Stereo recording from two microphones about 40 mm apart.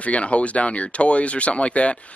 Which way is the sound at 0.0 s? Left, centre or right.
Left.